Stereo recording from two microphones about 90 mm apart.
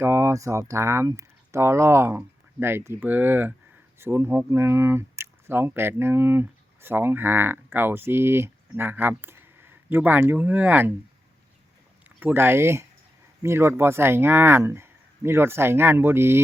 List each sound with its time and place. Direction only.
0.0 s speech: 30° right (ahead or behind)
12.0 s speech: 20° right (ahead or behind)